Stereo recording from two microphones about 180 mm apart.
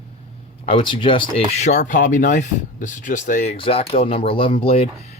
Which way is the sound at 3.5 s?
30° left (ahead or behind).